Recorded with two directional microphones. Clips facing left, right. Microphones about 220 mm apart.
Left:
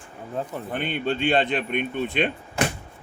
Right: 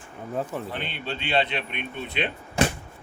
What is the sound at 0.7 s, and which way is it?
A man's voice, 50° left (ahead or behind).